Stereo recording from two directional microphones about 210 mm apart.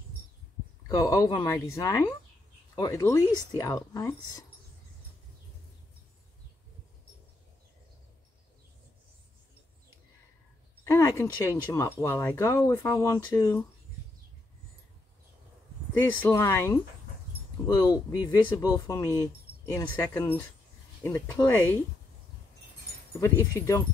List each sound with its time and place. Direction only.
0.8 s speech: 15° left (ahead or behind)
10.8 s speech: 15° left (ahead or behind)
16.0 s speech: 10° left (ahead or behind)
23.2 s speech: 15° left (ahead or behind)